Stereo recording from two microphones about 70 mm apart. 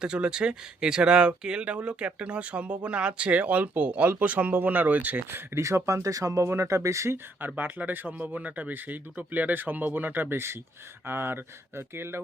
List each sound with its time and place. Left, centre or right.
0.0 s speech: centre
5.5 s speech: right
7.4 s speech: right